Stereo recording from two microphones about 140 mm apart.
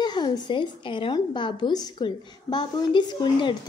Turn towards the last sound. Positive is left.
turn(degrees=30)  # may be behind; listen again after turning